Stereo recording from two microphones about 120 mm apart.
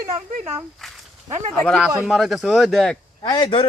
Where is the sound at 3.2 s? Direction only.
40° left (ahead or behind).